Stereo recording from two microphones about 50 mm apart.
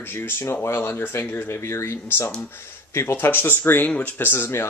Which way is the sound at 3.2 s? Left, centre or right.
Left.